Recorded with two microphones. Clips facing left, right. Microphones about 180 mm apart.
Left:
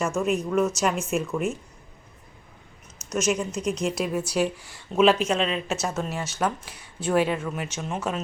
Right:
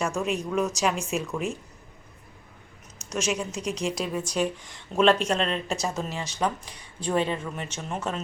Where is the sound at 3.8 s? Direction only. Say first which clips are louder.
Left 2 dB; 10° left (ahead or behind).